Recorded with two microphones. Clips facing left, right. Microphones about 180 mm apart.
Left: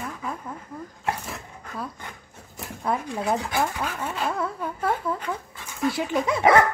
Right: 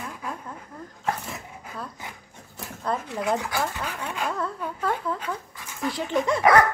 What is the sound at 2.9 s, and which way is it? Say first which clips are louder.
Speech: left 1 dB; 10° left (ahead or behind).